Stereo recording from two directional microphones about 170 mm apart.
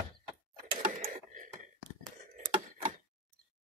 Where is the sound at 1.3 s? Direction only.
50° right (ahead or behind).